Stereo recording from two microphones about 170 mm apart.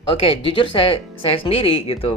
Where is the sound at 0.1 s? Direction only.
30° left (ahead or behind).